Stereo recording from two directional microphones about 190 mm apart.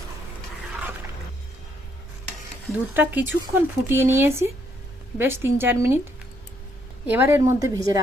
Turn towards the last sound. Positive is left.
turn(degrees=-15)  # may be behind; listen again after turning